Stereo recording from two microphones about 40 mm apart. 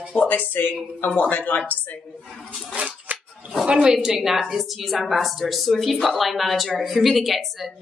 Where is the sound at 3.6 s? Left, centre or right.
Right.